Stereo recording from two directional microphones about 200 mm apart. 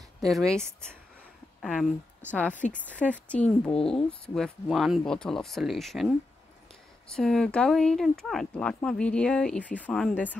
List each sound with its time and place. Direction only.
0.2 s speech: centre (ahead or behind)
1.6 s speech: centre (ahead or behind)
2.6 s speech: 35° left (ahead or behind)
3.3 s speech: 5° left (ahead or behind)